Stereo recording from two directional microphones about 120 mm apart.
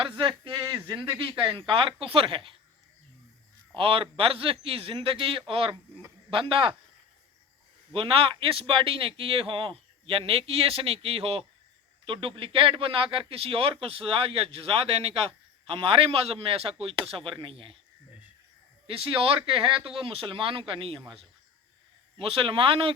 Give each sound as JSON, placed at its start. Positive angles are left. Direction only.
{"t": 0.2, "sound": "speech", "side_deg": -45}
{"t": 1.5, "sound": "speech", "side_deg": -45}
{"t": 3.8, "sound": "speech", "side_deg": -50}
{"t": 7.9, "sound": "speech", "side_deg": -50}
{"t": 18.9, "sound": "speech", "side_deg": -50}
{"t": 22.2, "sound": "speech", "side_deg": -50}